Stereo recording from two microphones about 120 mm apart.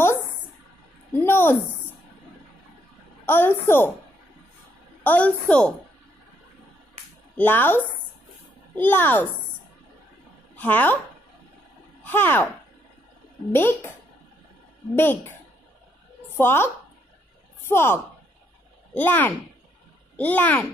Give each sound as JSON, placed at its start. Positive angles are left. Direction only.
{"t": 1.1, "sound": "a sound", "side_deg": 20}
{"t": 3.3, "sound": "a woman's voice", "side_deg": 20}
{"t": 5.0, "sound": "a woman's voice", "side_deg": 15}
{"t": 7.3, "sound": "a woman's voice", "side_deg": 15}
{"t": 10.5, "sound": "speech", "side_deg": 15}
{"t": 12.0, "sound": "speech", "side_deg": 15}
{"t": 13.5, "sound": "speech", "side_deg": 20}
{"t": 15.0, "sound": "speech", "side_deg": 20}
{"t": 16.3, "sound": "a woman's voice", "side_deg": 20}